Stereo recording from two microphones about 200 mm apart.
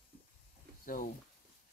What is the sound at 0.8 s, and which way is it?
Speech, 45° left (ahead or behind).